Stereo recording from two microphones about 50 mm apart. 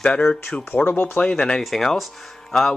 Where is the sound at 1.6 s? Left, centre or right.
Centre.